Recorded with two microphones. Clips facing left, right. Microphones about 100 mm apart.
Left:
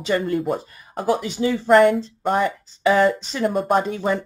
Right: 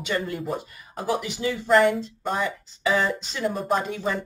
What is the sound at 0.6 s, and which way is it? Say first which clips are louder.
Speech: left 4 dB; 35° left (ahead or behind).